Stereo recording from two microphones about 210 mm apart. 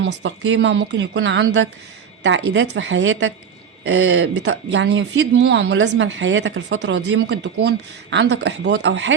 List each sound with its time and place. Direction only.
0.0 s speech: 60° right (ahead or behind)